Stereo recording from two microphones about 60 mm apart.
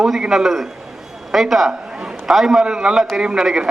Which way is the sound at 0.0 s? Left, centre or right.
Centre.